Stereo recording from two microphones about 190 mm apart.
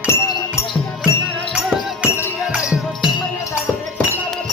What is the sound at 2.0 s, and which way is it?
Music, 10° left (ahead or behind).